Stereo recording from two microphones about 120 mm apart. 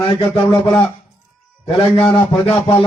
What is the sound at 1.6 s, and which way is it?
A man's voice, 50° left (ahead or behind).